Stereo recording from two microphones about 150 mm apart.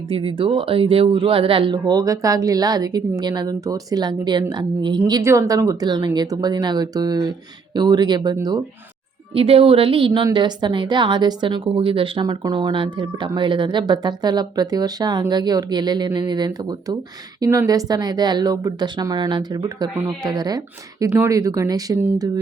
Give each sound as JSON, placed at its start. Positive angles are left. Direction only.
{"t": 0.1, "sound": "speech", "side_deg": -35}
{"t": 9.3, "sound": "speech", "side_deg": -40}